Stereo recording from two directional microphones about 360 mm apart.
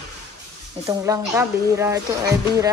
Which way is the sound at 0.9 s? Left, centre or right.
Centre.